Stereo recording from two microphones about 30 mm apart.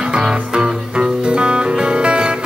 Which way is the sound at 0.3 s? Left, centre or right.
Right.